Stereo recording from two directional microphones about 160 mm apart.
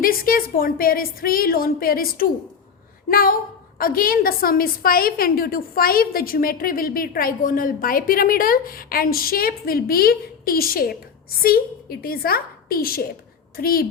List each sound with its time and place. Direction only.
0.0 s a woman's voice: 65° left (ahead or behind)